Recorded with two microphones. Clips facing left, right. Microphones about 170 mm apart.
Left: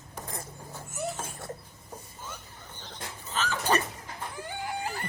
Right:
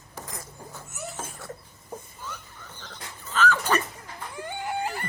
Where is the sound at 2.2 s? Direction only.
20° left (ahead or behind).